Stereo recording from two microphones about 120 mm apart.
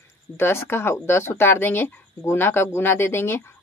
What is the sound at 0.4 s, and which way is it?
Speech, 20° left (ahead or behind).